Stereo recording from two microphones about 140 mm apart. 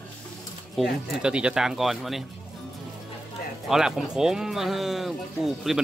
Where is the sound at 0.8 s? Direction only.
5° right (ahead or behind).